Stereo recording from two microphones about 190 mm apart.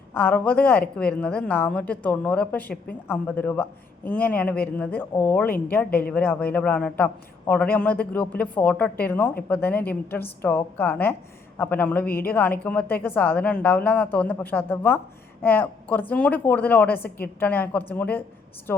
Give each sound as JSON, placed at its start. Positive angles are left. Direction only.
{"t": 0.1, "sound": "a woman's voice", "side_deg": 10}
{"t": 12.0, "sound": "a woman's voice", "side_deg": 50}
{"t": 12.3, "sound": "a woman's voice", "side_deg": 10}